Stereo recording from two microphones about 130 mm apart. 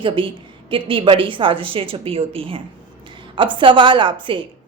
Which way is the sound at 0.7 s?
40° right (ahead or behind).